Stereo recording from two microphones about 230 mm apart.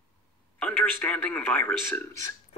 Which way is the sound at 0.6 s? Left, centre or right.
Centre.